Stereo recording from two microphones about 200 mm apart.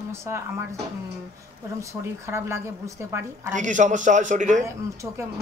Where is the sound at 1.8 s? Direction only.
15° right (ahead or behind).